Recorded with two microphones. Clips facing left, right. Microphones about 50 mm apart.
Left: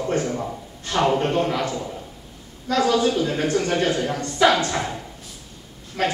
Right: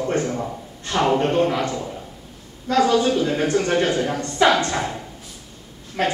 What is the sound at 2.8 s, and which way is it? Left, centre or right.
A man's voice, centre.